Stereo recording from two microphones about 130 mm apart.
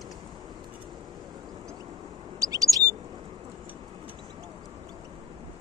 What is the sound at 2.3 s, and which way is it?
Chirp, 25° right (ahead or behind).